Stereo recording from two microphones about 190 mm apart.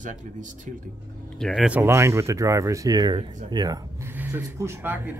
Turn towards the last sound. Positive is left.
turn(degrees=-10)  # may be behind; listen again after turning